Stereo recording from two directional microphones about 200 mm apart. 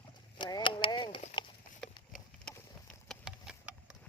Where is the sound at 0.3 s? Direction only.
20° left (ahead or behind).